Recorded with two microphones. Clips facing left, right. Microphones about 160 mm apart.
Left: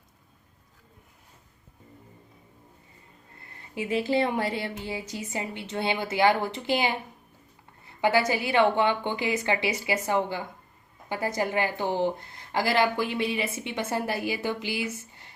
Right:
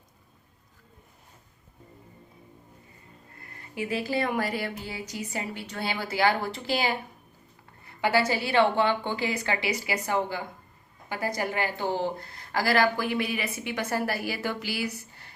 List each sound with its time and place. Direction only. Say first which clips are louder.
3.8 s a woman's voice: left 3 dB; 25° left (ahead or behind)